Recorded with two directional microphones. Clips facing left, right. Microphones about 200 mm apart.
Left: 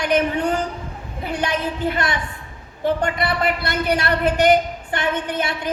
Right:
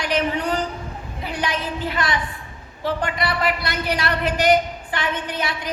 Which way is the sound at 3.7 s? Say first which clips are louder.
Left 3 dB; 50° left (ahead or behind).